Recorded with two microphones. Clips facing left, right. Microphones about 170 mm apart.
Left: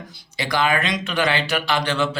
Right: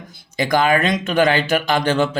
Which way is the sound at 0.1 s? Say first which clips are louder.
Right 7 dB; 45° right (ahead or behind).